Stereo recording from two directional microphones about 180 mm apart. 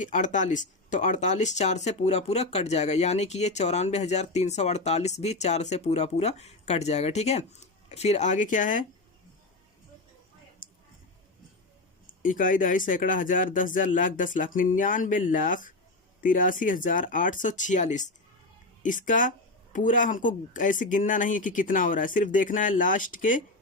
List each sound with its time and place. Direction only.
0.0 s speech: 45° left (ahead or behind)
12.0 s speech: 50° left (ahead or behind)